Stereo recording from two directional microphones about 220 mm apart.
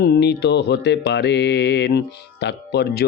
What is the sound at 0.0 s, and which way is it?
A man's voice, 50° left (ahead or behind).